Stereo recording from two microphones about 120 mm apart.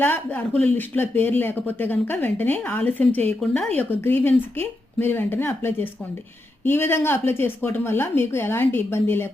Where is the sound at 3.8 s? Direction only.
15° left (ahead or behind).